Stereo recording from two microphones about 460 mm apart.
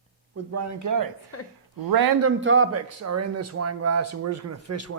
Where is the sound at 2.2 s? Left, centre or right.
Right.